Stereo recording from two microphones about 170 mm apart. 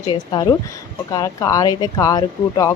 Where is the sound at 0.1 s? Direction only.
25° left (ahead or behind).